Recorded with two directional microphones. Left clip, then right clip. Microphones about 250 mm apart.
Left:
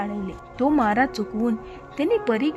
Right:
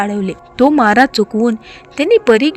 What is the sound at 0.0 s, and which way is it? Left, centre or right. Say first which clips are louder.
A woman's voice: right 12 dB; centre.